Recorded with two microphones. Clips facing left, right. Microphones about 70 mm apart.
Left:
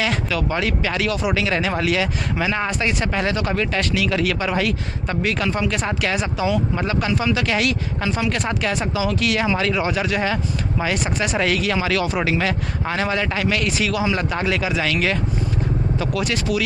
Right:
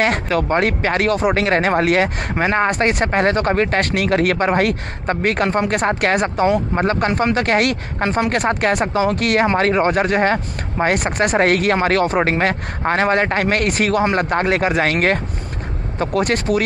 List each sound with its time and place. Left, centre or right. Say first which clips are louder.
0.0 s speech: right 5 dB; right